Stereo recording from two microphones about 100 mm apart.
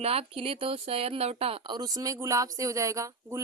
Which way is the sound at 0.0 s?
80° right.